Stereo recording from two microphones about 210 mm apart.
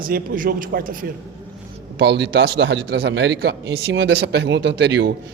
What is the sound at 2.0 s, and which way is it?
Speech, 55° right (ahead or behind).